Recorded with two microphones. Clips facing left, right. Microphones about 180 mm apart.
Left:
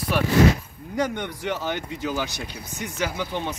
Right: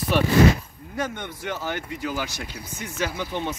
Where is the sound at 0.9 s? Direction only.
15° left (ahead or behind).